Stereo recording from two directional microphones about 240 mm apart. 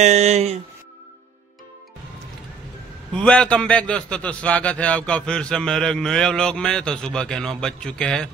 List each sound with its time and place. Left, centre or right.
0.0 s speech: right
3.1 s a man's voice: centre